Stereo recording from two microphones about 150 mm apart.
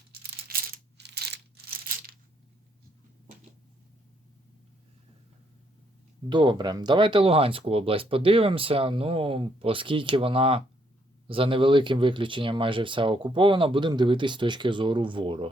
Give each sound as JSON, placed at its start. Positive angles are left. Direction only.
{"t": 0.1, "sound": "coin", "side_deg": -85}
{"t": 1.0, "sound": "a sound", "side_deg": -90}
{"t": 6.2, "sound": "speech", "side_deg": -30}